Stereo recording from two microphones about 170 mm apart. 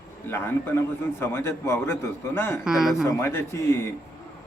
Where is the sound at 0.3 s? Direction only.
15° left (ahead or behind).